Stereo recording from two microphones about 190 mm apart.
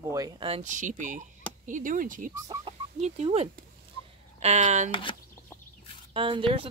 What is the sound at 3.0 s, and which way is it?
Speech, 35° right (ahead or behind).